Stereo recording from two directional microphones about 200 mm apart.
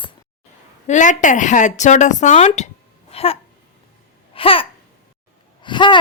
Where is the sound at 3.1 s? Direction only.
30° left (ahead or behind).